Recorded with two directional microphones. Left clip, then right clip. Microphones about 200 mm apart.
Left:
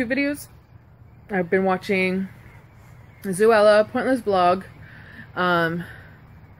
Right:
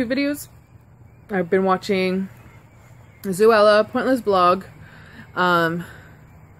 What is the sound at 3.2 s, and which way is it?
Speech, 20° right (ahead or behind).